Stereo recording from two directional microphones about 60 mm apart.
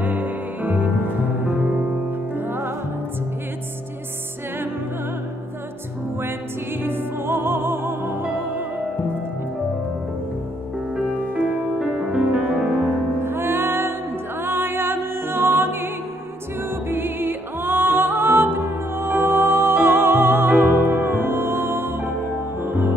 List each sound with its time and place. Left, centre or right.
0.0 s music: right
6.8 s music: right
11.1 s music: right
11.8 s music: centre
13.2 s music: right
16.9 s music: right